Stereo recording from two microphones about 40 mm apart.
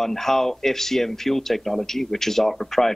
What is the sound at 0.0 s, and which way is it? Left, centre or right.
Speech, centre.